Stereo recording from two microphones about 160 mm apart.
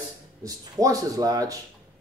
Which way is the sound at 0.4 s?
20° right (ahead or behind).